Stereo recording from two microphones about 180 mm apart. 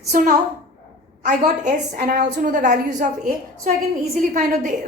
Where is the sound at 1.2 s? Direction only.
40° right (ahead or behind).